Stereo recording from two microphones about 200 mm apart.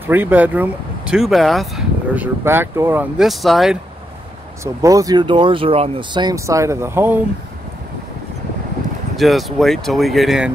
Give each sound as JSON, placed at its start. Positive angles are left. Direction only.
{"t": 0.0, "sound": "speech", "side_deg": -10}
{"t": 4.8, "sound": "speech", "side_deg": -15}
{"t": 9.1, "sound": "speech", "side_deg": 0}